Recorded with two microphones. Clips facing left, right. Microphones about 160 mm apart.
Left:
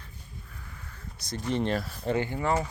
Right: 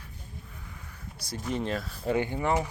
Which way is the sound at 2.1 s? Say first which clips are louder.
Even; 15° right (ahead or behind).